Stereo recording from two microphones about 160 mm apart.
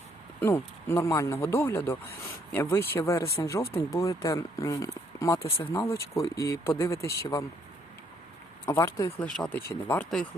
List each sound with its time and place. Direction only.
0.3 s speech: 15° left (ahead or behind)
8.6 s speech: 15° left (ahead or behind)
9.1 s speech: 5° left (ahead or behind)